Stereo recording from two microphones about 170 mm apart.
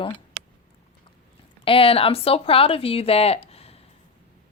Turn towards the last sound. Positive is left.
turn(degrees=35)  # may be behind; listen again after turning